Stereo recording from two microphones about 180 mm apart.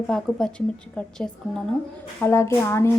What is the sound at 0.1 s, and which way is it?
A woman's voice, centre (ahead or behind).